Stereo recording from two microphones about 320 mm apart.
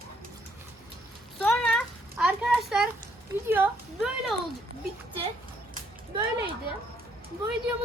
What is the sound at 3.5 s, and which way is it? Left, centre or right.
Speech, centre.